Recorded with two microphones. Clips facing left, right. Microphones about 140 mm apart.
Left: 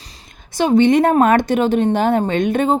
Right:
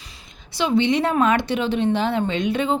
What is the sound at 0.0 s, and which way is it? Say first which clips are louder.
Speech: left 2 dB; 40° left (ahead or behind).